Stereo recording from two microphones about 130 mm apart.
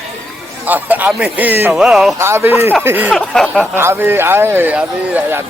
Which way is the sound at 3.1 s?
5° left (ahead or behind).